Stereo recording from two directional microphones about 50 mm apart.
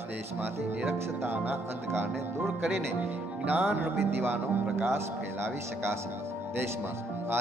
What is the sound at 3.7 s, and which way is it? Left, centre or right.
Speech, right.